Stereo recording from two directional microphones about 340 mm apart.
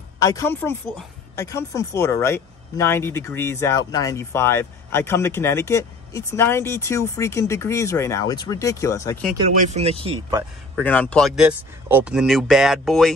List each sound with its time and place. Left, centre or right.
0.2 s speech: centre
9.6 s speech: centre
10.8 s speech: centre